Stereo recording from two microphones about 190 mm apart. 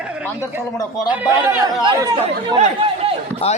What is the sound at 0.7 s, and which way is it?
Speech, 20° left (ahead or behind).